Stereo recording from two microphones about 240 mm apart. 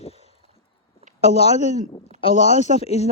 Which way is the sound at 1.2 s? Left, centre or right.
Left.